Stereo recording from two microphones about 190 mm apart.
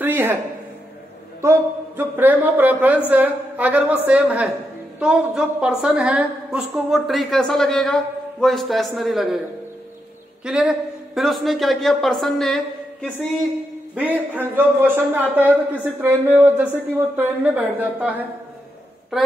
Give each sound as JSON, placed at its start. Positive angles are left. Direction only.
{"t": 0.0, "sound": "a sound", "side_deg": -10}
{"t": 1.4, "sound": "a man's voice", "side_deg": -15}
{"t": 10.4, "sound": "a woman's voice", "side_deg": -5}
{"t": 13.9, "sound": "a man's voice", "side_deg": -10}